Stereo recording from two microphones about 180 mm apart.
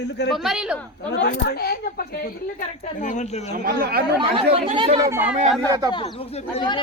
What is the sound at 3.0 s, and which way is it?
Speech, 40° left (ahead or behind).